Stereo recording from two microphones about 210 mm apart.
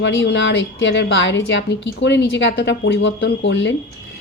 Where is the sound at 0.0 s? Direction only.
60° left (ahead or behind).